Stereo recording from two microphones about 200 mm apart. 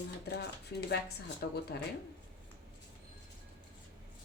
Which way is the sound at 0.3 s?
55° left (ahead or behind).